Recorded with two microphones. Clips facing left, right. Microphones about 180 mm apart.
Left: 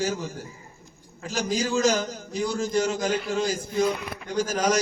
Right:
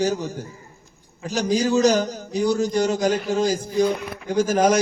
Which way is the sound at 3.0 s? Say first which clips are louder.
Right 5 dB; 40° right (ahead or behind).